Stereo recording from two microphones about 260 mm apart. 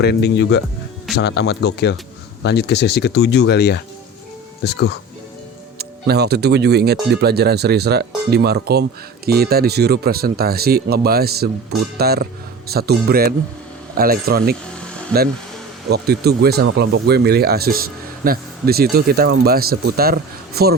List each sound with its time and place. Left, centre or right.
0.0 s speech: left
5.7 s speech: right
15.9 s speech: right